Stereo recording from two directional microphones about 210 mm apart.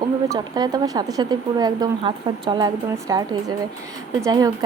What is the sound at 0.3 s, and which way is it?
Speech, 20° right (ahead or behind).